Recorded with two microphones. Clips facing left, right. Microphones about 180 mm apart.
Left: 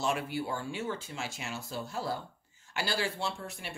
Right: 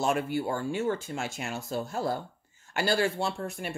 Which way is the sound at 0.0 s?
50° right (ahead or behind).